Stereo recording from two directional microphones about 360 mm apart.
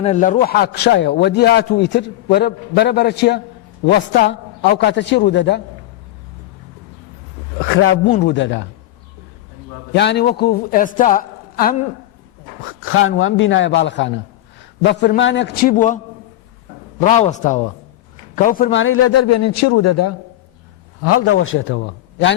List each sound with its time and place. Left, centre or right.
0.0 s a man's voice: centre
7.6 s a man's voice: left
9.9 s a man's voice: left
12.8 s a man's voice: left
17.0 s a man's voice: centre